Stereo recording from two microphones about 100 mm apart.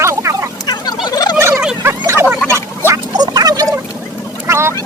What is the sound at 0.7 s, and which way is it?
Turkey, 40° left (ahead or behind).